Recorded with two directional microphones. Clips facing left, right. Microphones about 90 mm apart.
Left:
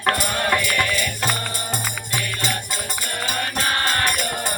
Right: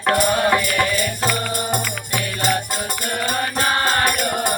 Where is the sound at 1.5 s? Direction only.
55° right (ahead or behind).